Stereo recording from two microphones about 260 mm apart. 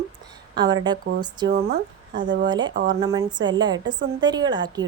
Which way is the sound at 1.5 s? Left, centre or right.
Right.